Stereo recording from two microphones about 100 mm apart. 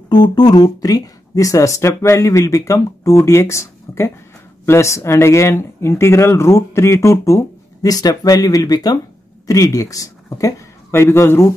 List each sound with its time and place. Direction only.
0.1 s speech: 45° left (ahead or behind); by 11.5 s 25° left (ahead or behind)